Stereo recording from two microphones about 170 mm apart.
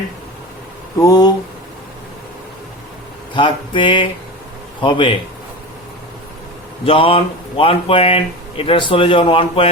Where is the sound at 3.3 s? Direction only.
30° left (ahead or behind).